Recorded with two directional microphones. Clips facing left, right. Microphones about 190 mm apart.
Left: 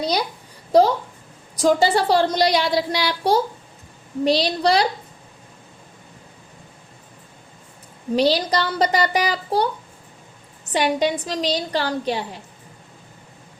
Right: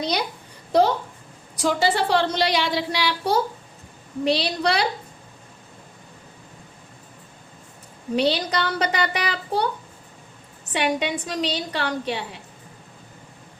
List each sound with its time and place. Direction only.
1.6 s a child's voice: 40° left (ahead or behind)
8.1 s a child's voice: 35° left (ahead or behind)
10.7 s a child's voice: 40° left (ahead or behind)